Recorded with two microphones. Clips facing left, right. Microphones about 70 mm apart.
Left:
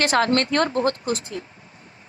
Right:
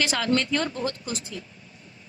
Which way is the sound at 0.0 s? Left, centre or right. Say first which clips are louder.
Left 5 dB; left.